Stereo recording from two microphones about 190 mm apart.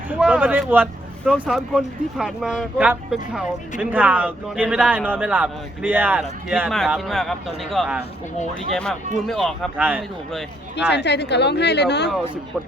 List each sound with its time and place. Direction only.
0.1 s speech: 5° right (ahead or behind)
1.2 s speech: centre (ahead or behind)
10.8 s speech: 60° left (ahead or behind)